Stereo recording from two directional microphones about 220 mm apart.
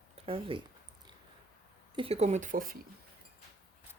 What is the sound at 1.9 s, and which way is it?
Speech, 25° right (ahead or behind).